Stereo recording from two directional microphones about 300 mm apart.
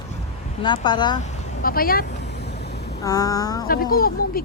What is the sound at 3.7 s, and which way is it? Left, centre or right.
Speech, left.